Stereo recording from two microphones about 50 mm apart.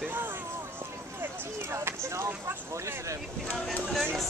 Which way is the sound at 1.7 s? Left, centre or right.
Right.